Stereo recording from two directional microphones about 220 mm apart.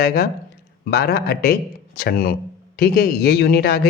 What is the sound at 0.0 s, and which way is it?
Speech, 45° left (ahead or behind).